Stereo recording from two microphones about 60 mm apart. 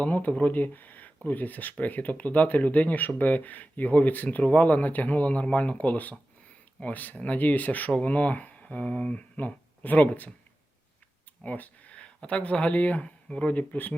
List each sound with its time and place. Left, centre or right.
0.0 s speech: left
11.4 s speech: left